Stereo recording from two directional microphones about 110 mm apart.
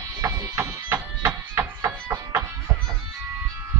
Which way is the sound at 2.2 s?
35° right (ahead or behind).